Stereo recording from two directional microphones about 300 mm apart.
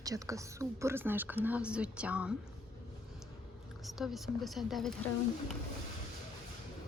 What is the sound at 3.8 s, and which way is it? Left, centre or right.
Speech, centre.